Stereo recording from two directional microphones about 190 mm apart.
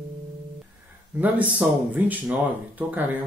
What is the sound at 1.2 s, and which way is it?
Speech, 10° right (ahead or behind).